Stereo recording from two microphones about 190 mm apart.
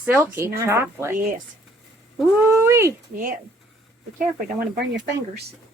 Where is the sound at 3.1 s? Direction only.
50° right (ahead or behind).